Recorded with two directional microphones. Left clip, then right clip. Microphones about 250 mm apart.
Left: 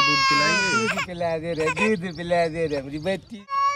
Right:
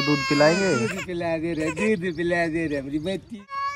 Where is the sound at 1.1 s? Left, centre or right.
Left.